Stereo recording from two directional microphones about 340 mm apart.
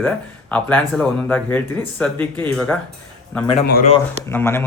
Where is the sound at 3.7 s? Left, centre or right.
Left.